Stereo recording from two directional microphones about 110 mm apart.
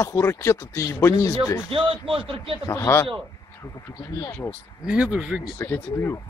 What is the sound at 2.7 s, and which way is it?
Speech, 25° left (ahead or behind).